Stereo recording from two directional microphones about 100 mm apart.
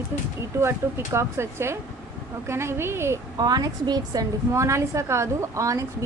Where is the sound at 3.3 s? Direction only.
40° right (ahead or behind).